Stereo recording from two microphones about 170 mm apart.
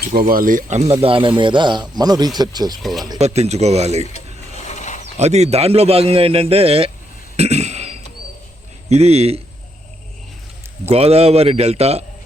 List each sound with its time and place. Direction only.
0.0 s speech: 60° right (ahead or behind)
1.0 s a man's voice: 30° right (ahead or behind)
2.8 s speech: centre (ahead or behind)
3.2 s a man's voice: 40° right (ahead or behind)
4.0 s mechanisms: 40° left (ahead or behind)
5.1 s a man's voice: 40° right (ahead or behind)
7.3 s a sound: 40° right (ahead or behind)
8.9 s a man's voice: 40° right (ahead or behind)
10.8 s a man's voice: 35° right (ahead or behind)